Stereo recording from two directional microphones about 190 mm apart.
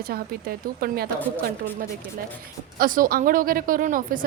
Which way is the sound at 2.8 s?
45° right (ahead or behind).